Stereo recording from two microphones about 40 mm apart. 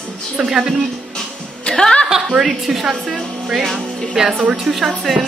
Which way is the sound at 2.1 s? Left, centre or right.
Centre.